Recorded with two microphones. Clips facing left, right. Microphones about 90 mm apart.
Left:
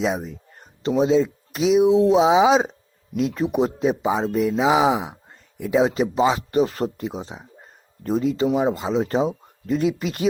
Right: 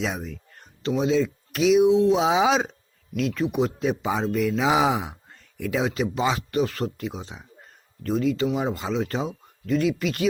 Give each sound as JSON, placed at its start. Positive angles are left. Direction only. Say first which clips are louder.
{"t": 0.0, "sound": "speech", "louder": "left 5 dB", "side_deg": 25}
{"t": 8.5, "sound": "speech", "louder": "left 5 dB", "side_deg": 20}